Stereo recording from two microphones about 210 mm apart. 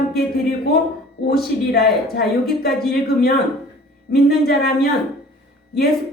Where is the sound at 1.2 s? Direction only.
50° left (ahead or behind).